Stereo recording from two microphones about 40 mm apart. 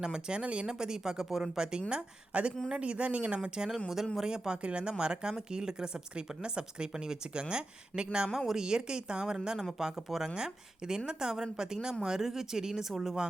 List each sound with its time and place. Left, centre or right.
0.0 s speech: centre
3.8 s speech: centre
4.2 s speech: centre
8.3 s speech: centre
8.5 s speech: centre
9.7 s speech: centre
10.3 s speech: centre